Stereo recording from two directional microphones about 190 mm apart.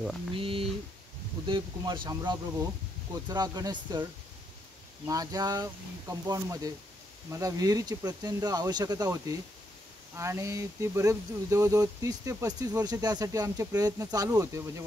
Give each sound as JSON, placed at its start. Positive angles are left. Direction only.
{"t": 0.3, "sound": "speech", "side_deg": -30}